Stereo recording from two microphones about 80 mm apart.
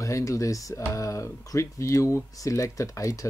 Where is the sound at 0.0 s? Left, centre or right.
Left.